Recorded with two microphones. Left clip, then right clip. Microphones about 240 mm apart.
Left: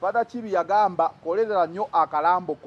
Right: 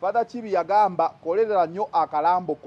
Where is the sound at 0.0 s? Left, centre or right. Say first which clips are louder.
Even; centre.